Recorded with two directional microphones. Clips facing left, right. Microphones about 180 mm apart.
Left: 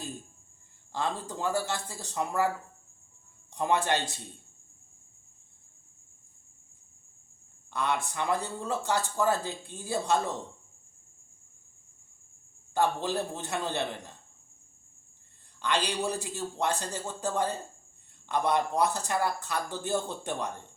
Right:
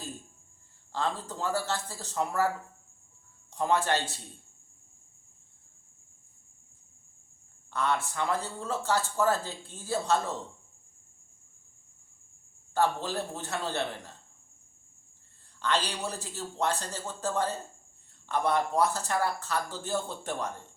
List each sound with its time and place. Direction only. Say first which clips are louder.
0.9 s speech: even; 15° left (ahead or behind)
3.5 s speech: even; 15° left (ahead or behind)
7.7 s speech: right 1 dB; 15° left (ahead or behind)
12.7 s speech: left 1 dB; 15° left (ahead or behind)
15.6 s speech: left 1 dB; 15° left (ahead or behind)